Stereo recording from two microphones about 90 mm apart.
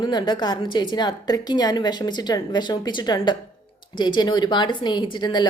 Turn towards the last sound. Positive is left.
turn(degrees=55)  # may be behind; listen again after turning